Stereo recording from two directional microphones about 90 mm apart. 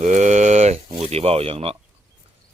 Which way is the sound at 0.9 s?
90° right.